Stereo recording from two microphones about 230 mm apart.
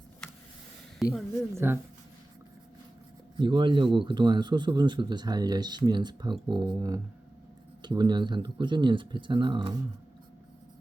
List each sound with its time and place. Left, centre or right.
1.0 s speech: centre
3.3 s speech: right